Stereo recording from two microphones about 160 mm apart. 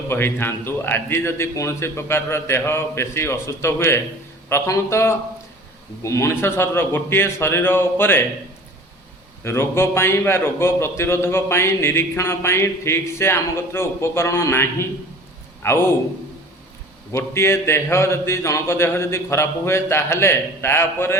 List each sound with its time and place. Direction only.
0.1 s a man's voice: 15° left (ahead or behind)
9.4 s a man's voice: 15° left (ahead or behind)
17.1 s a man's voice: 15° left (ahead or behind)